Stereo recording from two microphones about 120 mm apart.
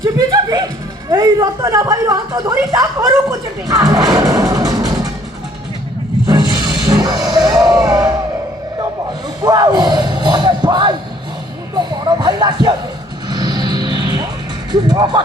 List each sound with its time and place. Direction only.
0.0 s music: 30° right (ahead or behind)
1.1 s speech: 30° right (ahead or behind)
6.2 s music: 35° right (ahead or behind)
9.4 s speech: 35° right (ahead or behind)
11.7 s a sound: 35° right (ahead or behind)
13.3 s music: 35° right (ahead or behind)
14.7 s speech: 35° right (ahead or behind)